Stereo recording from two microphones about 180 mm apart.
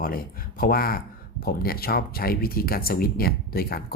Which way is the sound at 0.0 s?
55° left (ahead or behind).